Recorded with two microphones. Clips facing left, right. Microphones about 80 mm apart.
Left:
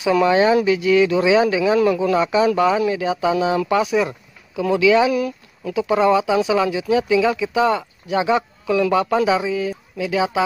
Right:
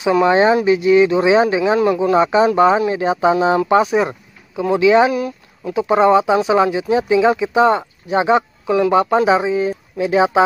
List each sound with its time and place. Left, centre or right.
0.0 s speech: right